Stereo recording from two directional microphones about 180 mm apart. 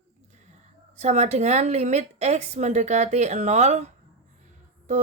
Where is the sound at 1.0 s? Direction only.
40° right (ahead or behind).